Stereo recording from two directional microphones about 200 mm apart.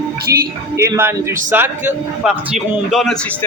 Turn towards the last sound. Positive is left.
turn(degrees=0)  # may be behind; listen again after turning